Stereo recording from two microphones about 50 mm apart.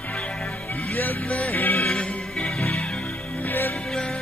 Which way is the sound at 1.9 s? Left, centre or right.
Centre.